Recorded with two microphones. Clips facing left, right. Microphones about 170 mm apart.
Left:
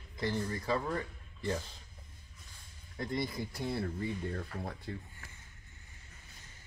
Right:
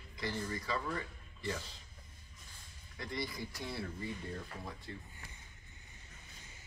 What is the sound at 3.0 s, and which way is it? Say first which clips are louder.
Speech: left 5 dB; 50° left (ahead or behind).